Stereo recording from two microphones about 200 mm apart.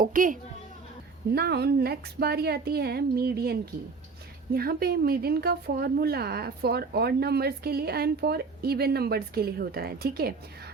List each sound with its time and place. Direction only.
0.0 s a woman's voice: 40° right (ahead or behind)
1.3 s a woman's voice: 50° right (ahead or behind)